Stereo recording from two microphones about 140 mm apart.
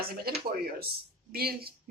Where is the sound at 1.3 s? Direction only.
90° right.